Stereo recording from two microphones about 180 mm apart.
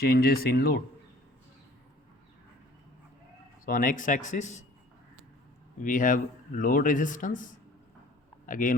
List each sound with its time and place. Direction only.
0.0 s speech: 60° left (ahead or behind)
3.7 s speech: 50° left (ahead or behind)
5.8 s speech: 45° left (ahead or behind)